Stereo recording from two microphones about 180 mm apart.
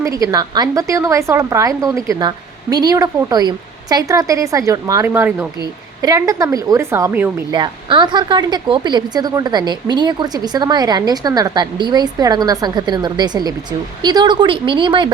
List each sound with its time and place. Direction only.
0.0 s a woman's voice: 20° right (ahead or behind)
7.5 s speech: 25° right (ahead or behind)